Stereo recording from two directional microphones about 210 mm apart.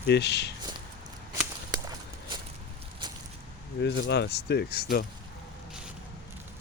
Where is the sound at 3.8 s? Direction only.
55° left (ahead or behind).